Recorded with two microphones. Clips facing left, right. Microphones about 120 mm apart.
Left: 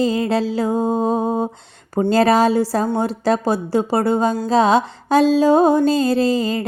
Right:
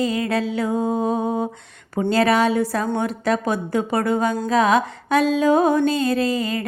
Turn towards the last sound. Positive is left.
turn(degrees=30)  # may be behind; listen again after turning